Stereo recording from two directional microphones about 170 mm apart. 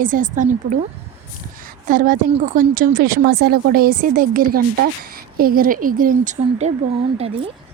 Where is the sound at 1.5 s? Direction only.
55° right (ahead or behind).